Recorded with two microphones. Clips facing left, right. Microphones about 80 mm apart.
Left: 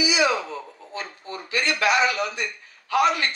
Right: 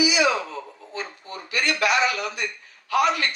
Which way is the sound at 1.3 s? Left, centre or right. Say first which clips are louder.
Left 1 dB; left.